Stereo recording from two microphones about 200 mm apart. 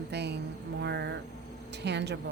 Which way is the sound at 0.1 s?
55° right (ahead or behind).